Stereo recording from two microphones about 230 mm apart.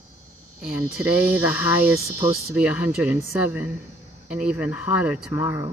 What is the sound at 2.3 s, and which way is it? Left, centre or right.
Speech, centre.